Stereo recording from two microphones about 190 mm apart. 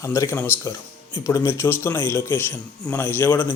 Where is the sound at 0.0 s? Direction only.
15° left (ahead or behind).